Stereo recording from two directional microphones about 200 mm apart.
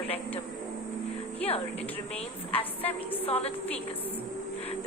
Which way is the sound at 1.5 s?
30° left (ahead or behind).